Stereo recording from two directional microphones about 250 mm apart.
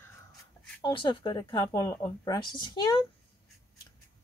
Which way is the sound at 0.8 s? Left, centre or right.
Centre.